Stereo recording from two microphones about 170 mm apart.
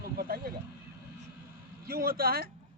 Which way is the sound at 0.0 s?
65° right (ahead or behind).